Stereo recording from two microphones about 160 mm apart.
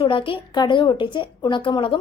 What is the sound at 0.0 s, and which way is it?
A woman's voice, 30° left (ahead or behind).